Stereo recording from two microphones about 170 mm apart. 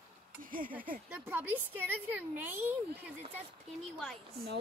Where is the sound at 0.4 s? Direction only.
55° right (ahead or behind).